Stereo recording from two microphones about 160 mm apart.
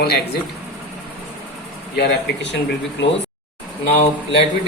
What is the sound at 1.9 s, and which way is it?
Speech, 90° left.